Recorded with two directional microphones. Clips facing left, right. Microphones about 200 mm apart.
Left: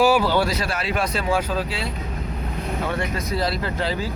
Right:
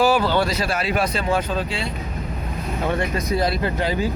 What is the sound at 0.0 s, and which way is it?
Speech, 10° left (ahead or behind).